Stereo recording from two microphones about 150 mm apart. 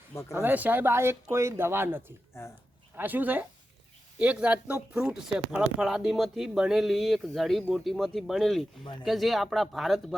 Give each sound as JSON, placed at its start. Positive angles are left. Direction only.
{"t": 0.1, "sound": "speech", "side_deg": 20}
{"t": 0.4, "sound": "speech", "side_deg": -10}
{"t": 8.8, "sound": "speech", "side_deg": 35}
{"t": 9.0, "sound": "speech", "side_deg": 0}